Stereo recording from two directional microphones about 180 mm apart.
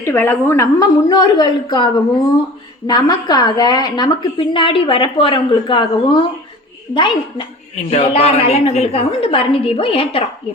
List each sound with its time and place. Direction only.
0.0 s a woman's voice: 15° left (ahead or behind); by 10.2 s 35° left (ahead or behind)